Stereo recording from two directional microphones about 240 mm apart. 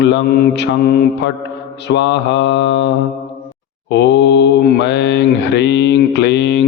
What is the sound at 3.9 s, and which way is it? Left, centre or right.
Mantra, left.